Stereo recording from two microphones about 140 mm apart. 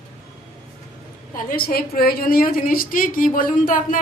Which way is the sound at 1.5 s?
90° left.